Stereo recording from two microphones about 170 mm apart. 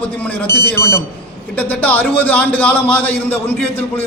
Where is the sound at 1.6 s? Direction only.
10° left (ahead or behind).